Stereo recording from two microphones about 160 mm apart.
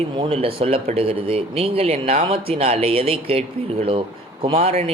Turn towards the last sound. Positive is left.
turn(degrees=-40)  # may be behind; listen again after turning